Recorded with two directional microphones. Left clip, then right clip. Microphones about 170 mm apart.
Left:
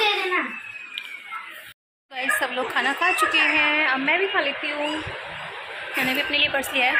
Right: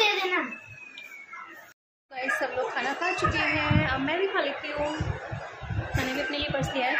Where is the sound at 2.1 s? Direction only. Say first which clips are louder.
Left 4 dB; centre (ahead or behind).